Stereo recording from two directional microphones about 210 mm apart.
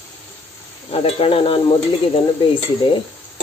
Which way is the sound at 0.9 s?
25° left (ahead or behind).